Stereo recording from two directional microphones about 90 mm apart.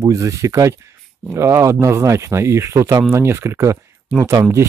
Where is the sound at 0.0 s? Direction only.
40° right (ahead or behind).